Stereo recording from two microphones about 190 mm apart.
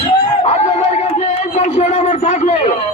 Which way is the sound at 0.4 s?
35° left (ahead or behind).